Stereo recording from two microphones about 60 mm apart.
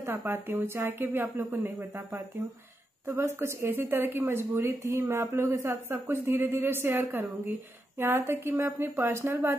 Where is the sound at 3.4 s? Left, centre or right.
Right.